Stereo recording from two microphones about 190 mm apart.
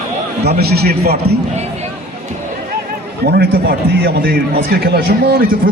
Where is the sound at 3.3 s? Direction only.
55° right (ahead or behind).